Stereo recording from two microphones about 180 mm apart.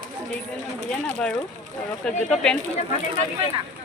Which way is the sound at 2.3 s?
5° left (ahead or behind).